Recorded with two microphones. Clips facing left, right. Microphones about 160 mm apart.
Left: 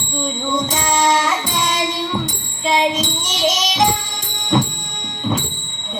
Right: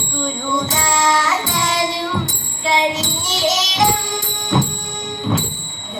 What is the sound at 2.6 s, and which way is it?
Child singing, 20° left (ahead or behind).